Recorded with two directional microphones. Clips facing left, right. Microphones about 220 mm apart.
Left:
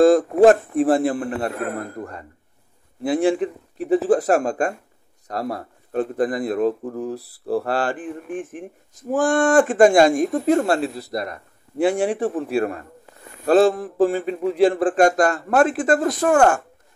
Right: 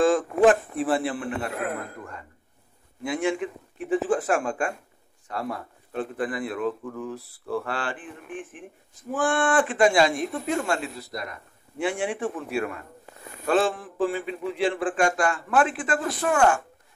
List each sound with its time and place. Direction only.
0.0 s speech: 40° left (ahead or behind)